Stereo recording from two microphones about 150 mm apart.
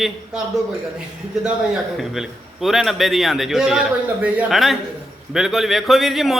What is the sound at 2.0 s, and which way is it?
A man's voice, centre (ahead or behind).